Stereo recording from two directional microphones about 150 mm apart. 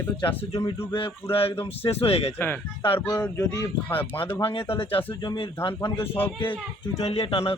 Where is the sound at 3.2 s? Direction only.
20° left (ahead or behind).